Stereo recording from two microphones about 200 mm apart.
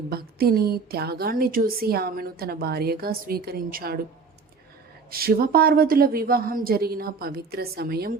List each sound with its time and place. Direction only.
0.1 s a woman's voice: 50° right (ahead or behind)
5.1 s a woman's voice: 45° right (ahead or behind)